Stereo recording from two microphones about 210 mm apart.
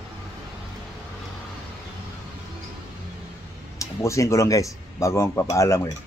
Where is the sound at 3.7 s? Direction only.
15° left (ahead or behind).